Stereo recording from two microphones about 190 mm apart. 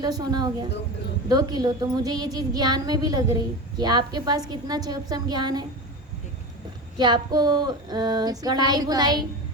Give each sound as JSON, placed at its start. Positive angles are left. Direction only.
{"t": 0.0, "sound": "child singing", "side_deg": -20}
{"t": 6.9, "sound": "child singing", "side_deg": -20}